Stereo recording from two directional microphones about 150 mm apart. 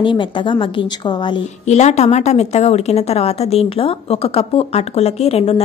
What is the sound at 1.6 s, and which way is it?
A woman's voice, 50° left (ahead or behind).